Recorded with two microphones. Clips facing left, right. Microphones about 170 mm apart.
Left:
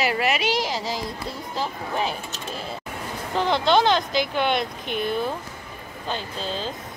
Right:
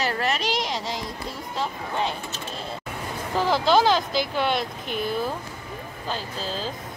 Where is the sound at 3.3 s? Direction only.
5° right (ahead or behind).